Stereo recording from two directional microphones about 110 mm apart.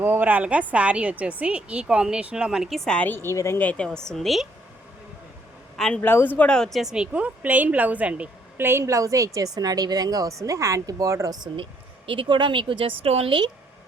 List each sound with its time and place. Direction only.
0.0 s a woman's voice: 15° right (ahead or behind); by 3.6 s 25° left (ahead or behind)
3.6 s a woman's voice: 10° left (ahead or behind)
5.7 s a man's voice: 5° left (ahead or behind)
6.0 s a woman's voice: 20° left (ahead or behind); by 11.4 s 30° right (ahead or behind)
11.5 s speech: 55° right (ahead or behind)
13.0 s speech: 65° right (ahead or behind)